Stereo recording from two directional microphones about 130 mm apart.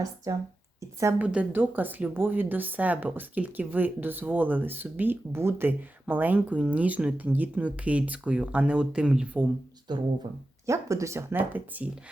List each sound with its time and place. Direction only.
0.8 s a sound: 25° right (ahead or behind)
1.2 s speech: 10° right (ahead or behind)
9.9 s speech: 35° right (ahead or behind)
10.7 s speech: 25° right (ahead or behind)